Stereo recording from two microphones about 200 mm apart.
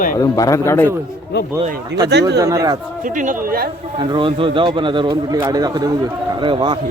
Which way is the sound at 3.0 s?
40° right (ahead or behind).